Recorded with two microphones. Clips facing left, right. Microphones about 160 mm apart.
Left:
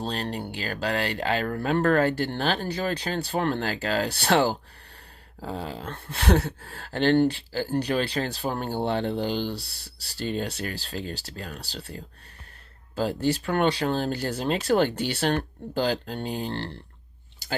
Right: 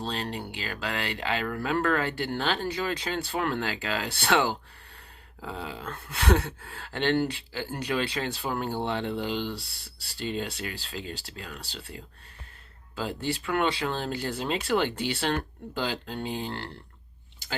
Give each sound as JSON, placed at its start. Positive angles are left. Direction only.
{"t": 0.0, "sound": "speech", "side_deg": 40}